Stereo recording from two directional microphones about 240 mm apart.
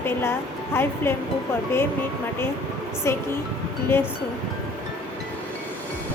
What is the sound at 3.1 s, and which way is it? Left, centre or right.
Speech, centre.